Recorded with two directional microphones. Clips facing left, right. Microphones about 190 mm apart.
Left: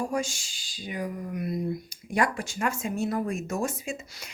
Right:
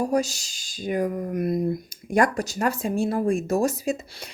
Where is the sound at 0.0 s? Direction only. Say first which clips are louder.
Right 6 dB; 40° right (ahead or behind).